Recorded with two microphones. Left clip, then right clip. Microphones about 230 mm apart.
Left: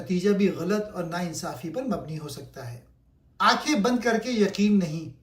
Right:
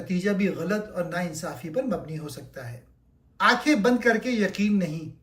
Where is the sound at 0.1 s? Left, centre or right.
Centre.